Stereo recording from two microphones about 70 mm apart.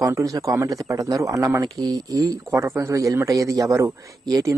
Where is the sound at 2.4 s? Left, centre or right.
Right.